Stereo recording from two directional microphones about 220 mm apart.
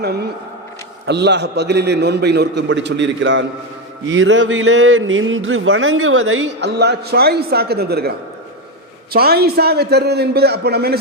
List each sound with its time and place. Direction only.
0.0 s a man's voice: 50° right (ahead or behind)
4.1 s a sound: 55° right (ahead or behind)
9.1 s a man's voice: 45° right (ahead or behind)